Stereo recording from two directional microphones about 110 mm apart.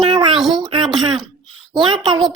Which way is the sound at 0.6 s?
45° right (ahead or behind).